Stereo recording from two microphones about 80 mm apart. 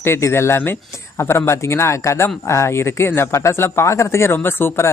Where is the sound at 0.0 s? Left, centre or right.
Left.